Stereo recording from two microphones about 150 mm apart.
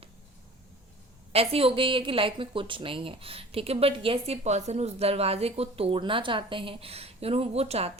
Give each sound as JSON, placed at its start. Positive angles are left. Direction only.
{"t": 1.3, "sound": "a woman's voice", "side_deg": -40}